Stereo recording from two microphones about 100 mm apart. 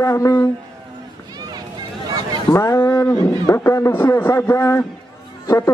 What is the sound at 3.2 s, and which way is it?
Speech, 25° left (ahead or behind).